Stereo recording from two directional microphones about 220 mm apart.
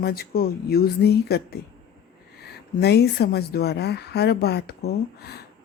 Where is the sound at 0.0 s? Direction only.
45° left (ahead or behind).